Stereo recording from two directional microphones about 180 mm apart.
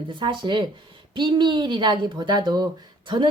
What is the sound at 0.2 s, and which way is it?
Speech, 25° right (ahead or behind).